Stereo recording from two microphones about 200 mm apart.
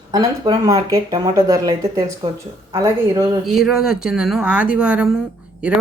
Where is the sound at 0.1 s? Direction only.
20° right (ahead or behind).